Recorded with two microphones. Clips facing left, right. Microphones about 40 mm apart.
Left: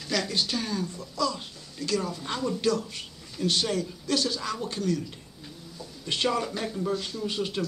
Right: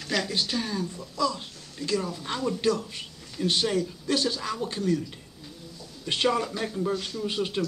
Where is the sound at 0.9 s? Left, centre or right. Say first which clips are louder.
Right 3 dB; centre.